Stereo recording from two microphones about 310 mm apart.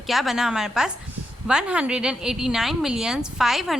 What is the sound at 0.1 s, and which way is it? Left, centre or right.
A woman's voice, centre.